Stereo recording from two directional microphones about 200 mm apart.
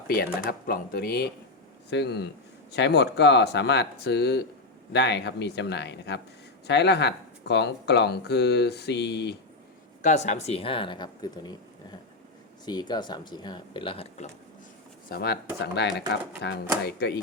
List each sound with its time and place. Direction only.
0.1 s speech: 45° left (ahead or behind)
10.0 s speech: 35° left (ahead or behind)
15.1 s speech: 55° left (ahead or behind)